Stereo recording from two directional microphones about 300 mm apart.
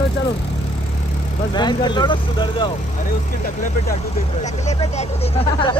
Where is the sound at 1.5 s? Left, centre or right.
Centre.